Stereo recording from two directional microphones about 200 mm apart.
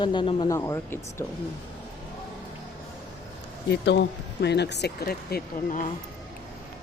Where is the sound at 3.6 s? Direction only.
60° left (ahead or behind).